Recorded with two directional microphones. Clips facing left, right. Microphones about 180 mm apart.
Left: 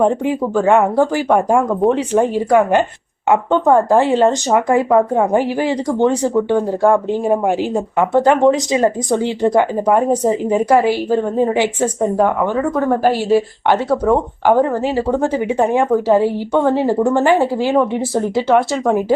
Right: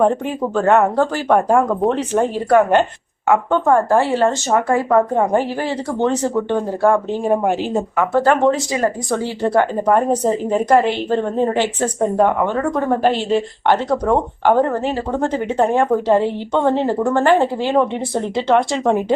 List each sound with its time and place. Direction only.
0.0 s speech: 15° left (ahead or behind)
4.9 s speech: 5° left (ahead or behind)
12.1 s speech: centre (ahead or behind)